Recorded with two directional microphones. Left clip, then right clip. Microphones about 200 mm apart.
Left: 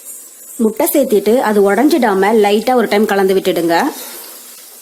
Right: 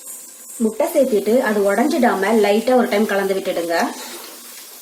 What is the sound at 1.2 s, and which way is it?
Speech, 60° left (ahead or behind).